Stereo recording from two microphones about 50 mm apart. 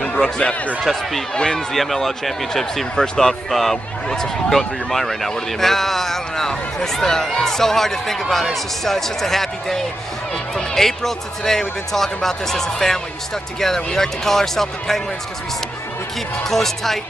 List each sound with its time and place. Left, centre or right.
0.1 s speech: centre
1.7 s speech: centre
16.4 s speech: centre